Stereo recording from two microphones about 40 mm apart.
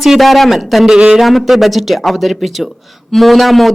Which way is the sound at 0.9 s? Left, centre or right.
Right.